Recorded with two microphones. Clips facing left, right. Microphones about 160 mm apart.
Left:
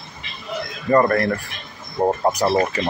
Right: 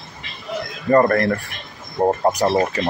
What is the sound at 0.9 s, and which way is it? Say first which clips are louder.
Speech: right 1 dB; 40° right (ahead or behind).